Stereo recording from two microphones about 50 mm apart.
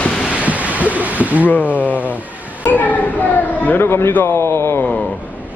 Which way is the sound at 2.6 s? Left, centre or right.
Left.